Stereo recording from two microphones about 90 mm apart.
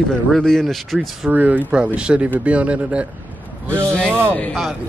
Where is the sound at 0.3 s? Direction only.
5° left (ahead or behind).